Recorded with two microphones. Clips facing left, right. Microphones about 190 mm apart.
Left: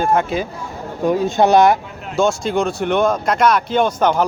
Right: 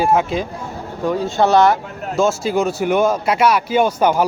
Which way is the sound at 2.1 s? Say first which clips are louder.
Even; 5° right (ahead or behind).